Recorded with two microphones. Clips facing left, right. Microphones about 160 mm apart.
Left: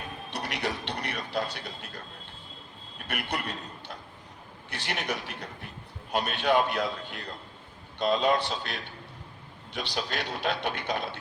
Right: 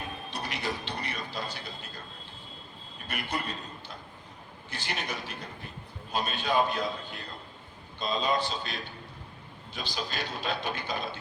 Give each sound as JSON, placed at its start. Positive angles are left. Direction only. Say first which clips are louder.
{"t": 0.3, "sound": "a man's voice", "louder": "left 3 dB", "side_deg": 65}
{"t": 3.1, "sound": "a man's voice", "louder": "left 1 dB", "side_deg": 70}